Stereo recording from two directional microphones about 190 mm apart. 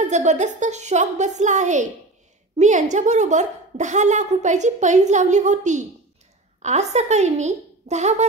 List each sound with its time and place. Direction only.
0.0 s a woman's voice: 35° right (ahead or behind)